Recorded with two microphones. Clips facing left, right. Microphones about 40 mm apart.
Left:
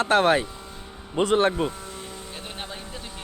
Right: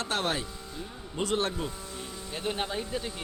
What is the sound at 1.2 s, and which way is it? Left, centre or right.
Speech, left.